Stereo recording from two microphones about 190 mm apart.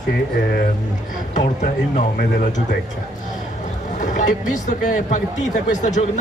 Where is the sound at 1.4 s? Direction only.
40° left (ahead or behind).